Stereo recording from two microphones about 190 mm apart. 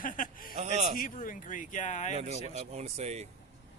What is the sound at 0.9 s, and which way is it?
Speech, 45° left (ahead or behind).